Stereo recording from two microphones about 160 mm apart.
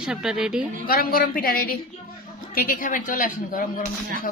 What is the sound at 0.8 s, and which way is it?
A woman's voice, 65° left (ahead or behind).